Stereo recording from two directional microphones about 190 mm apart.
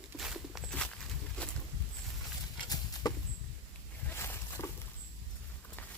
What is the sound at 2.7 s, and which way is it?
Horse, 20° left (ahead or behind).